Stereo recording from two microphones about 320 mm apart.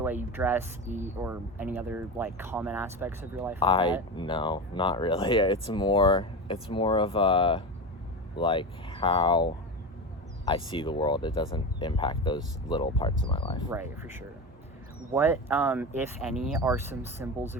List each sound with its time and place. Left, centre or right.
0.0 s speech: centre
3.6 s speech: centre
13.7 s speech: centre